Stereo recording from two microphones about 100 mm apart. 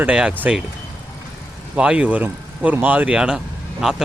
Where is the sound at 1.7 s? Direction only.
10° right (ahead or behind).